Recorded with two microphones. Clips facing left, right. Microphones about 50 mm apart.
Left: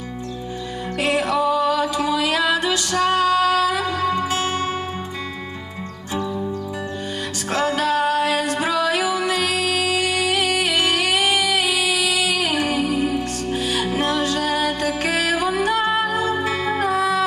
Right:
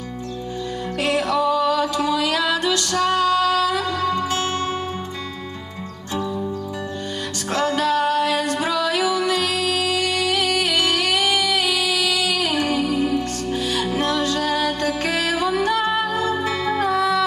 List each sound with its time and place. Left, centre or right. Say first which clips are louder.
0.9 s music: left 1 dB; left
2.0 s female singing: left 1 dB; left
3.8 s music: left 1 dB; left
7.5 s music: even; centre
9.0 s music: right 1 dB; centre